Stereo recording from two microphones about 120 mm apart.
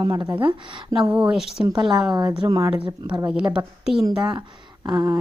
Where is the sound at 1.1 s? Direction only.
10° right (ahead or behind).